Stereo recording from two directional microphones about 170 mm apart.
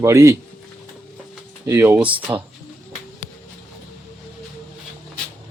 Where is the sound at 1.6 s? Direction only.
15° right (ahead or behind).